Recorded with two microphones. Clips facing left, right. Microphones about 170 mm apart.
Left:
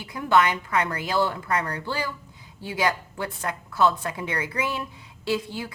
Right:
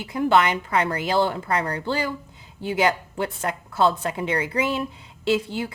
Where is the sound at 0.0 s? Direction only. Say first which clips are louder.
Right 2 dB; 25° right (ahead or behind).